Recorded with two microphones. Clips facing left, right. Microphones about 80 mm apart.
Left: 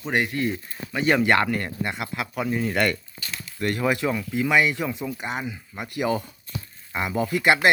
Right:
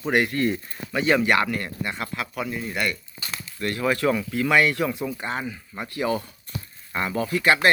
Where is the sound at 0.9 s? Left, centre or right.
Left.